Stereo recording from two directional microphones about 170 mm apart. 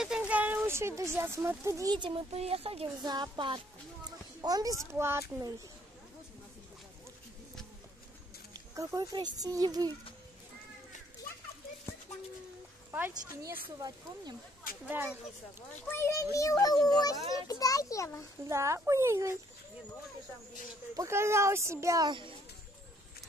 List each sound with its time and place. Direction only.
0.0 s speech: 5° right (ahead or behind); by 2.9 s 35° right (ahead or behind)
3.0 s speech: 25° right (ahead or behind)
8.7 s speech: 20° right (ahead or behind)
12.9 s speech: 10° right (ahead or behind)
14.9 s speech: 10° right (ahead or behind)
15.7 s a child's voice: 15° left (ahead or behind)
18.5 s speech: 15° right (ahead or behind)
20.9 s speech: 15° right (ahead or behind)